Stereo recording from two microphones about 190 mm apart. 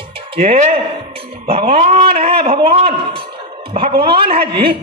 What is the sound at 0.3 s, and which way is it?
A man's voice, 30° right (ahead or behind).